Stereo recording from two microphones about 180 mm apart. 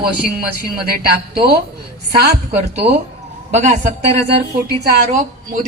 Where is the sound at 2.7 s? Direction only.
35° right (ahead or behind).